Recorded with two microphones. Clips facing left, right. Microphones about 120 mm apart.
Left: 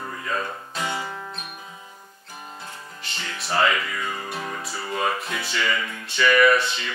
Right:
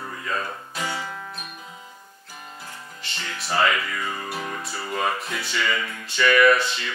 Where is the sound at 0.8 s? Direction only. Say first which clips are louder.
Left 1 dB; 20° left (ahead or behind).